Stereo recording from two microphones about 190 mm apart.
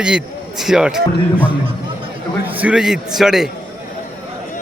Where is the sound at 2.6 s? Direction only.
5° right (ahead or behind).